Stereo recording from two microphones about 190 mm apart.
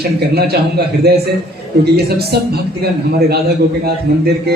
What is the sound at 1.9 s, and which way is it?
A man's voice, 55° right (ahead or behind).